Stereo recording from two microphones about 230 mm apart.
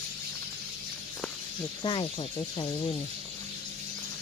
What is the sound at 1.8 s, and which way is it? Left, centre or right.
Speech, left.